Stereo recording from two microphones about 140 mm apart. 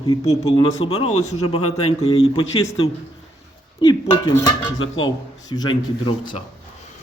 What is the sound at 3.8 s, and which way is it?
Speech, 30° left (ahead or behind).